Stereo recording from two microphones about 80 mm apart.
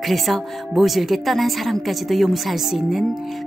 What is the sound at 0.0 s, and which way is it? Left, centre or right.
A woman's voice, centre.